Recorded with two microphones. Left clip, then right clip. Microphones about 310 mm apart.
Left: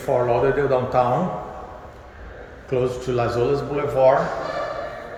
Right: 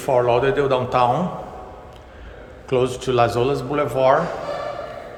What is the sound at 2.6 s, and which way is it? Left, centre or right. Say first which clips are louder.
Speech: right 2 dB; centre.